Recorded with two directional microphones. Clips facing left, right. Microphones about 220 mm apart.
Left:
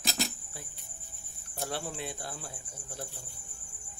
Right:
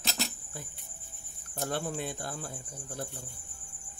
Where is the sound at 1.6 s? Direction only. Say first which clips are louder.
Right 3 dB; 50° right (ahead or behind).